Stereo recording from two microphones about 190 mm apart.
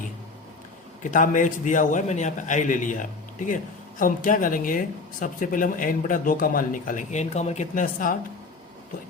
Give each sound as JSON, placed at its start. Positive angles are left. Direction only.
{"t": 1.0, "sound": "a man's voice", "side_deg": 45}